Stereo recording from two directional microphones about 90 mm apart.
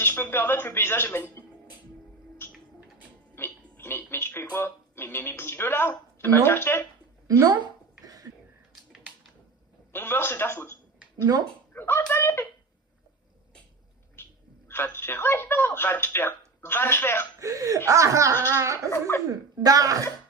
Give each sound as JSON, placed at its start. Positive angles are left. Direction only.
{"t": 0.0, "sound": "speech", "side_deg": 25}
{"t": 3.3, "sound": "a sound", "side_deg": 25}
{"t": 4.5, "sound": "speech", "side_deg": 25}
{"t": 7.3, "sound": "speech", "side_deg": -40}
{"t": 7.6, "sound": "a sound", "side_deg": -45}
{"t": 9.9, "sound": "speech", "side_deg": 25}
{"t": 11.7, "sound": "a sound", "side_deg": 25}
{"t": 12.1, "sound": "speech", "side_deg": 25}
{"t": 14.2, "sound": "a sound", "side_deg": 25}
{"t": 14.7, "sound": "speech", "side_deg": 25}
{"t": 17.4, "sound": "speech", "side_deg": -40}
{"t": 18.9, "sound": "speech", "side_deg": 30}
{"t": 19.3, "sound": "speech", "side_deg": -40}